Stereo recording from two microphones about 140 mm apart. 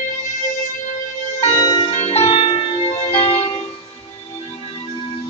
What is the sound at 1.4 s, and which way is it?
Bell, 35° left (ahead or behind).